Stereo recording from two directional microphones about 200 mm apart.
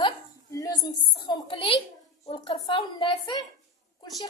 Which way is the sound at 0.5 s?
15° left (ahead or behind).